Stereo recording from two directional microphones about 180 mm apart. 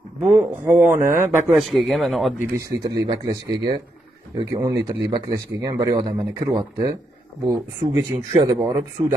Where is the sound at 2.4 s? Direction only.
15° right (ahead or behind).